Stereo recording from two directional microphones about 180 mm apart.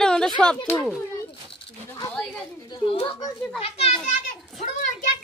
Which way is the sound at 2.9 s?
25° left (ahead or behind).